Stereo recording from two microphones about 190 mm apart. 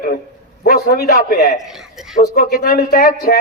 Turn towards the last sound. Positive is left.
turn(degrees=55)  # may be behind; listen again after turning